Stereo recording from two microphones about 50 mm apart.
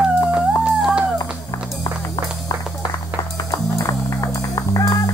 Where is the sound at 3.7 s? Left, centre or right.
Left.